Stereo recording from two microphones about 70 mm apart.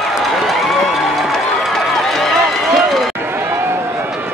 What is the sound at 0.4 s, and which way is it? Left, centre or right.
Run, centre.